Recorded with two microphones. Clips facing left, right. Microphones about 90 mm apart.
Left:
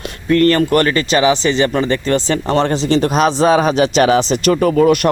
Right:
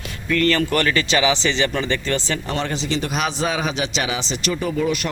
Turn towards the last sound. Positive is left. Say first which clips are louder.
# left 10 dB
turn(degrees=60)  # may be behind; listen again after turning